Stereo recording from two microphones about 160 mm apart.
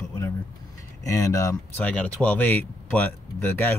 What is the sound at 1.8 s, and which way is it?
Speech, 10° left (ahead or behind).